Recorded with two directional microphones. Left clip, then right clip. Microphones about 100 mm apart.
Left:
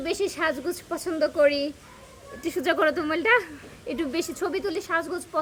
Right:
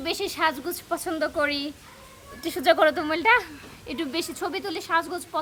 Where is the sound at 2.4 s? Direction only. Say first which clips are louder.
Right 3 dB; 50° right (ahead or behind).